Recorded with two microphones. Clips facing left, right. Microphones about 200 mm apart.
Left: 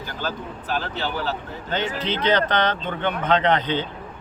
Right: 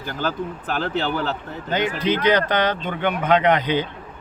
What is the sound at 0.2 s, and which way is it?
Speech, 50° right (ahead or behind).